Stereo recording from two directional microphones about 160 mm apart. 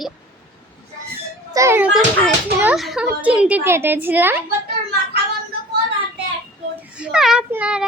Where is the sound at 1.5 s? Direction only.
15° right (ahead or behind).